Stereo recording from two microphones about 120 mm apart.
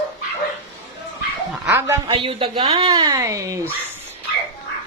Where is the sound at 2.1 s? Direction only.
45° right (ahead or behind).